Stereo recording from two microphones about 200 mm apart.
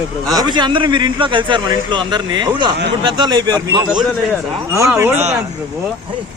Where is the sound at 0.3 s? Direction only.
20° right (ahead or behind).